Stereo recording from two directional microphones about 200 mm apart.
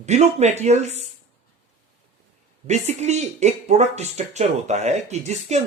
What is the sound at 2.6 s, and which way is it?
Speech, 35° right (ahead or behind).